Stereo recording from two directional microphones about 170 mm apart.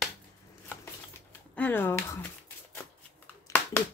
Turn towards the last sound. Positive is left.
turn(degrees=10)  # may be behind; listen again after turning